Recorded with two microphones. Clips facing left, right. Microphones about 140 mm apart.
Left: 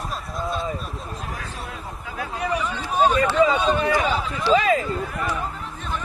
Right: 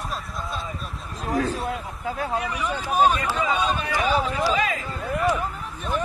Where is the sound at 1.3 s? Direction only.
35° right (ahead or behind).